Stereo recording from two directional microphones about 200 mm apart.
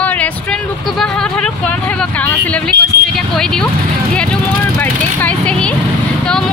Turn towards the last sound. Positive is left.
turn(degrees=5)  # may be behind; listen again after turning